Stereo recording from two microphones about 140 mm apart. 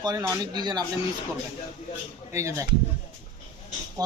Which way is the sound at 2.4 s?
20° right (ahead or behind).